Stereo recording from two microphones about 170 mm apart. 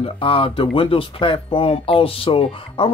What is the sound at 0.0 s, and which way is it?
Speech, 30° left (ahead or behind).